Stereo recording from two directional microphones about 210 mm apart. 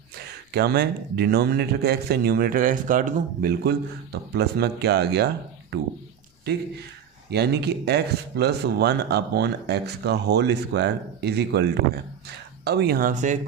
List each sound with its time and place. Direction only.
0.5 s speech: 50° right (ahead or behind)
7.3 s speech: 50° right (ahead or behind)